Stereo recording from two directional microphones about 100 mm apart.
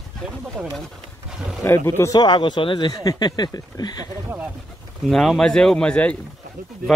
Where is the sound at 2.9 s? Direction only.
40° left (ahead or behind).